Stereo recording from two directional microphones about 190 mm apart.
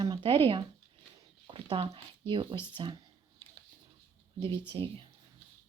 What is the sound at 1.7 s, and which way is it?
Speech, 30° right (ahead or behind).